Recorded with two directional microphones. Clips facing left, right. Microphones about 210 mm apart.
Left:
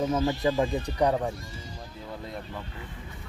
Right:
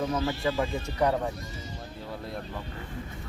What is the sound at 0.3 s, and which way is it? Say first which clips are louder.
Speech: left 3 dB; 15° left (ahead or behind).